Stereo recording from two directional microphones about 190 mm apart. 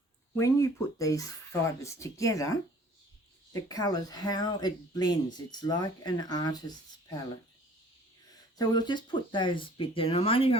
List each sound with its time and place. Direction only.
0.3 s speech: 15° left (ahead or behind)
8.5 s speech: 20° left (ahead or behind)